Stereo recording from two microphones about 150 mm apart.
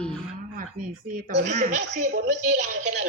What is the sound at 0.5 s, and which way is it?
A woman's voice, 70° right (ahead or behind).